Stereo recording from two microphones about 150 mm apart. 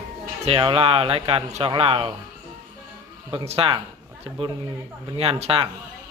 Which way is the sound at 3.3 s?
35° right (ahead or behind).